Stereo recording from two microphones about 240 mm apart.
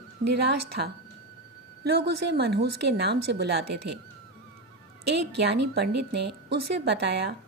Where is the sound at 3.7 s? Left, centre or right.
Right.